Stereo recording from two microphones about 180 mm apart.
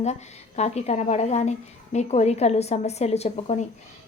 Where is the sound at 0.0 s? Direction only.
40° left (ahead or behind).